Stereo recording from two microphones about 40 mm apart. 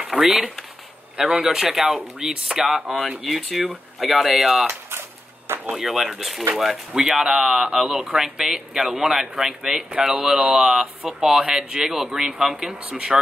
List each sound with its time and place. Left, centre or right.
0.1 s speech: centre
1.1 s speech: centre
4.1 s speech: centre
5.7 s speech: centre
8.8 s speech: right
9.1 s speech: centre